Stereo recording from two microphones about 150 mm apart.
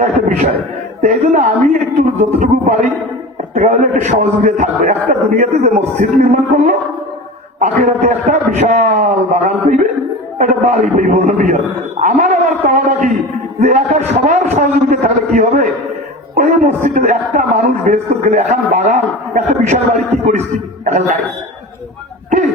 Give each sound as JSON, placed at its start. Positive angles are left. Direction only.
{"t": 0.0, "sound": "a man's voice", "side_deg": -50}